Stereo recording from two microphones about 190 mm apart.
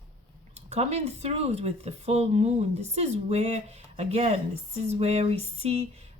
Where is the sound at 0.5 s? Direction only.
35° right (ahead or behind).